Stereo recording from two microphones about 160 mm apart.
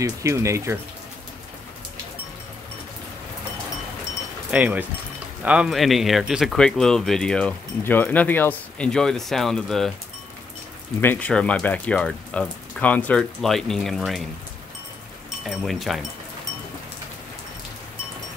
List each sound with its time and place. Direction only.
0.0 s speech: 20° right (ahead or behind)
4.5 s speech: 10° right (ahead or behind)
11.0 s speech: 10° left (ahead or behind)
15.4 s speech: centre (ahead or behind)